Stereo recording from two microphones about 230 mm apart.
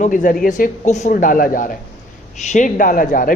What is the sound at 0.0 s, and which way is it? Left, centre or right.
A woman's voice, left.